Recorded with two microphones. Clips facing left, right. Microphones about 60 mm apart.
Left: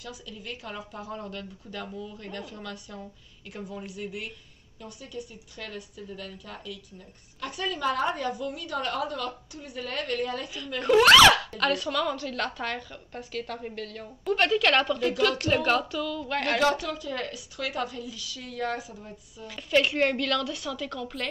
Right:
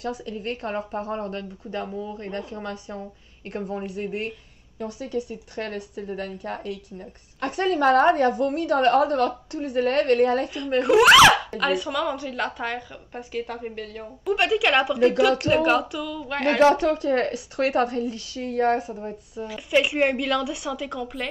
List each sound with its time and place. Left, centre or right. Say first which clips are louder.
0.0 s speech: right 11 dB; right
4.9 s speech: right 10 dB; right
5.3 s a woman's voice: right 9 dB; right
10.5 s speech: right 10 dB; right
10.8 s a woman's voice: right 3 dB; centre
16.4 s speech: right 8 dB; right
16.7 s speech: right 10 dB; right
19.4 s a woman's voice: right 3 dB; centre